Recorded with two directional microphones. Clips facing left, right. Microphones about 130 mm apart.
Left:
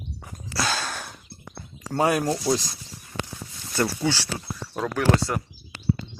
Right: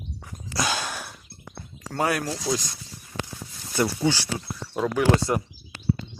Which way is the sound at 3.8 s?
10° right (ahead or behind).